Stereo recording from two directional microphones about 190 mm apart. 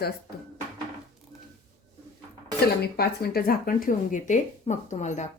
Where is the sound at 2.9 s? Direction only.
55° left (ahead or behind); by 5.2 s 40° left (ahead or behind).